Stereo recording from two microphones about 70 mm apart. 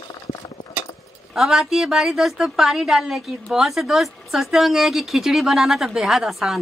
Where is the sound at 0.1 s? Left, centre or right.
Left.